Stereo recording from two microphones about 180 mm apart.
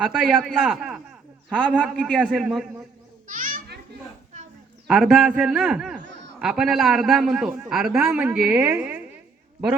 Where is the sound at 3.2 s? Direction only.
50° right (ahead or behind).